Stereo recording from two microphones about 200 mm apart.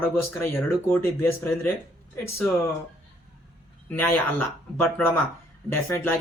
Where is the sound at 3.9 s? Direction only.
10° left (ahead or behind).